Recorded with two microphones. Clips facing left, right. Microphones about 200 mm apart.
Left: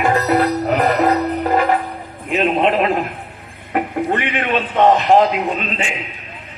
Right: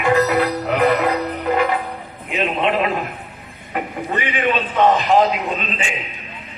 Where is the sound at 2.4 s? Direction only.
45° left (ahead or behind).